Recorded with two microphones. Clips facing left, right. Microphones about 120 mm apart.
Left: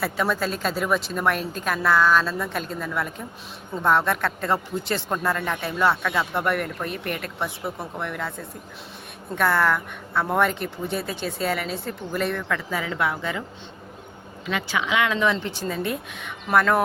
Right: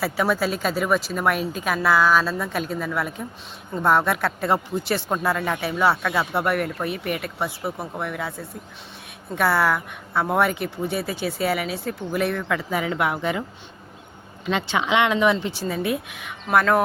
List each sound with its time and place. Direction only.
0.0 s a woman's voice: 5° right (ahead or behind)
14.4 s speech: 25° right (ahead or behind); by 16.8 s centre (ahead or behind)